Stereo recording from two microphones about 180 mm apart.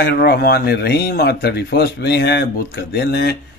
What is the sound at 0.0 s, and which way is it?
Speech, 60° left (ahead or behind).